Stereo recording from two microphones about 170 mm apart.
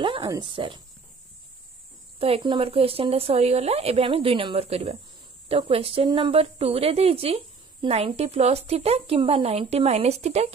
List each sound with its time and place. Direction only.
0.0 s speech: 30° right (ahead or behind)
2.1 s a woman's voice: 35° right (ahead or behind)